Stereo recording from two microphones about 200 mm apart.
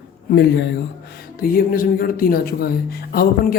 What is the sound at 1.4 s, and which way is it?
Speech, 45° left (ahead or behind).